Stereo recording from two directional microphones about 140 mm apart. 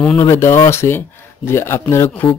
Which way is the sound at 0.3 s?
20° left (ahead or behind).